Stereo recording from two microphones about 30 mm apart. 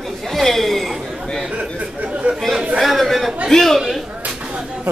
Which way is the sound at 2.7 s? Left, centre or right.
Centre.